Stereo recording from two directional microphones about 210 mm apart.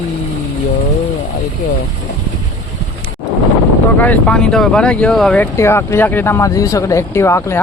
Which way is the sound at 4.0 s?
5° left (ahead or behind).